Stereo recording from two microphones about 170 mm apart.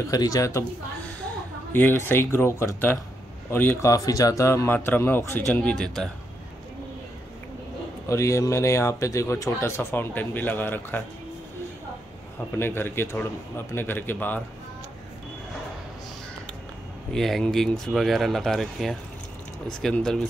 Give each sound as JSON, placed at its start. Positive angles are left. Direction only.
{"t": 0.1, "sound": "speech", "side_deg": 20}
{"t": 1.7, "sound": "speech", "side_deg": 10}
{"t": 8.1, "sound": "speech", "side_deg": 15}
{"t": 12.5, "sound": "speech", "side_deg": 15}
{"t": 17.1, "sound": "speech", "side_deg": 5}